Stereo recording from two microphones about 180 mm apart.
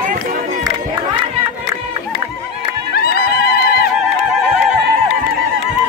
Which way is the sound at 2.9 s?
60° left (ahead or behind).